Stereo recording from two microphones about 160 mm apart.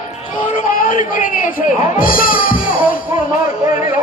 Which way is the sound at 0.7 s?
55° left (ahead or behind).